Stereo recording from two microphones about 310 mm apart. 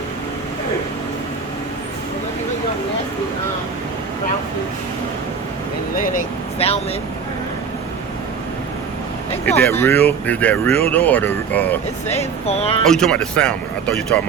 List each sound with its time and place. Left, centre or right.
6.0 s speech: left
9.5 s speech: centre
12.0 s speech: centre
12.9 s speech: centre